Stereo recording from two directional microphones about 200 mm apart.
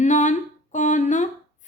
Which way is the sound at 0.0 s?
40° left (ahead or behind).